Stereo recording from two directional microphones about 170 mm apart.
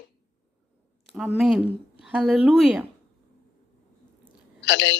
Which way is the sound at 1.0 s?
Centre (ahead or behind).